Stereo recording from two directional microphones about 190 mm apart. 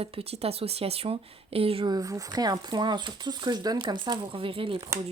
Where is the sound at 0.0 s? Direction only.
30° right (ahead or behind).